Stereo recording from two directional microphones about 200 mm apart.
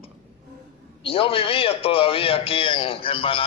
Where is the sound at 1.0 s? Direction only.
25° left (ahead or behind).